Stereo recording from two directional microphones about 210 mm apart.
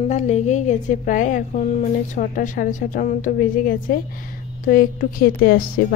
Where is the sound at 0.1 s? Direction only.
35° left (ahead or behind).